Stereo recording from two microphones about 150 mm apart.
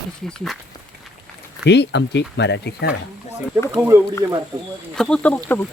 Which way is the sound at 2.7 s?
90° left.